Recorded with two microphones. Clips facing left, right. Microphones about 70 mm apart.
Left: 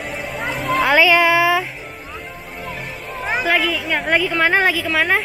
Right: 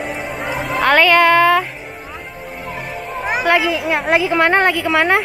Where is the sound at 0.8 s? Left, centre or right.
Centre.